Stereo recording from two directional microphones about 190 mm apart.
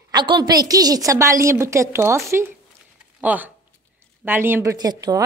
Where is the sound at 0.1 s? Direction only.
25° right (ahead or behind).